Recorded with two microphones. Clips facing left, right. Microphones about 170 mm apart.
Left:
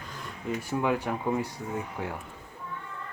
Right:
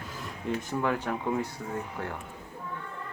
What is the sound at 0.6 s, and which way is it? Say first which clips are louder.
Speech: left 3 dB; 10° left (ahead or behind).